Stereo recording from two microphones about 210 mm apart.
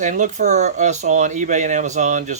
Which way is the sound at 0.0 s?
35° right (ahead or behind).